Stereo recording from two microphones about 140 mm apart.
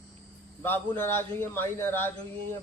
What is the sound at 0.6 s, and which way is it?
A man's voice, 15° left (ahead or behind).